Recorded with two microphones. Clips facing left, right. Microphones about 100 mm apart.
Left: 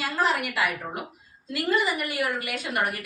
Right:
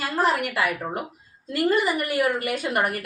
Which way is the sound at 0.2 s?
45° right (ahead or behind).